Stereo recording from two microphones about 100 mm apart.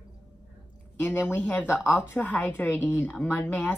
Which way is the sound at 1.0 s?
15° left (ahead or behind).